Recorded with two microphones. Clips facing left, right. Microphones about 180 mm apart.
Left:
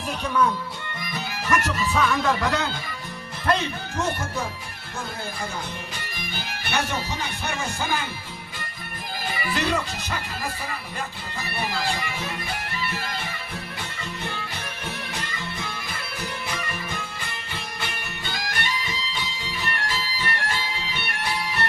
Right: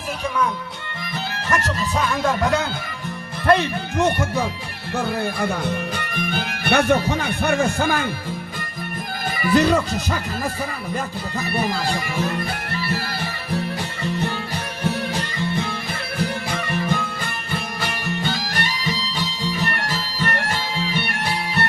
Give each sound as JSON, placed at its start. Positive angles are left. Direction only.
{"t": 1.5, "sound": "music", "side_deg": -35}
{"t": 3.4, "sound": "speech", "side_deg": -60}
{"t": 4.9, "sound": "speech", "side_deg": -65}
{"t": 9.3, "sound": "music", "side_deg": -45}
{"t": 16.5, "sound": "music", "side_deg": -65}
{"t": 17.7, "sound": "music", "side_deg": -40}
{"t": 19.5, "sound": "music", "side_deg": -50}